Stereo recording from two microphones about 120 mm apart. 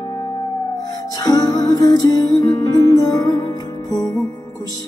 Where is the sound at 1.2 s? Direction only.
30° left (ahead or behind).